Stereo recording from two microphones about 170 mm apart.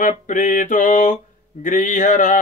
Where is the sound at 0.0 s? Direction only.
50° left (ahead or behind).